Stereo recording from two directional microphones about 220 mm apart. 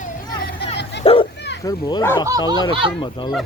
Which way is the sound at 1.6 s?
15° left (ahead or behind).